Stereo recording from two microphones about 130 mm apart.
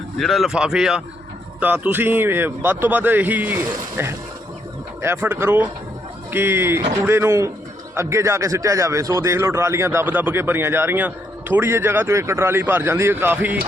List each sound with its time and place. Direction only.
0.2 s a man's voice: centre (ahead or behind)